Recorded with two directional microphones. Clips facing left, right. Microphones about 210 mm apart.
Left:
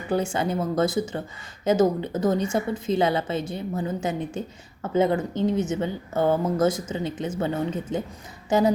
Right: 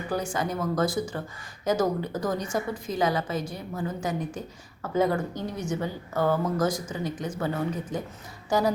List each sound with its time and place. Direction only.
0.1 s a woman's voice: 25° left (ahead or behind)